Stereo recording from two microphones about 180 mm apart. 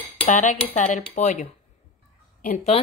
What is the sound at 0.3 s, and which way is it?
A woman's voice, 45° left (ahead or behind).